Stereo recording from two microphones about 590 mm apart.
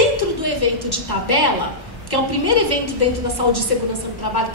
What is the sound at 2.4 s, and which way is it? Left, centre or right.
Speech, left.